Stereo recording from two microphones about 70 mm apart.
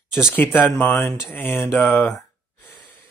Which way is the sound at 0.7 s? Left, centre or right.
Centre.